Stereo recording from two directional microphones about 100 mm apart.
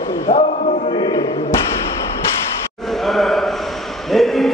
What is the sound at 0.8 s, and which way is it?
Chant, 45° left (ahead or behind).